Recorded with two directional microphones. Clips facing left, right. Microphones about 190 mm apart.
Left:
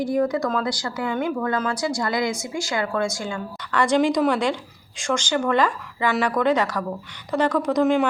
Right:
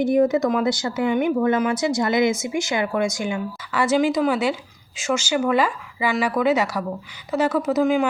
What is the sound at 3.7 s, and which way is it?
A woman's voice, 5° right (ahead or behind).